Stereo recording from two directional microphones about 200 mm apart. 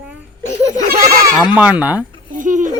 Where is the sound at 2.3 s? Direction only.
40° right (ahead or behind).